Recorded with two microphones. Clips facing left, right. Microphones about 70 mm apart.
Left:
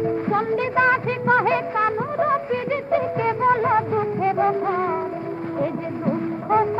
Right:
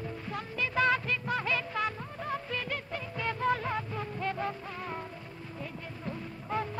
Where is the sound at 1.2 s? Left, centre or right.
Left.